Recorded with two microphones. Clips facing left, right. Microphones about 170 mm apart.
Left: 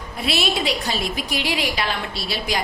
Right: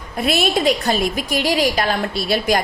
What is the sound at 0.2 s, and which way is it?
A woman's voice, 50° right (ahead or behind).